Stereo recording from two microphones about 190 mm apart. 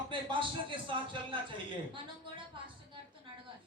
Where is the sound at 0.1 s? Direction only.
25° right (ahead or behind).